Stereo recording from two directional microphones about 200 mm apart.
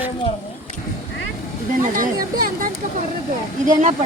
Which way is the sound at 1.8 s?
40° right (ahead or behind).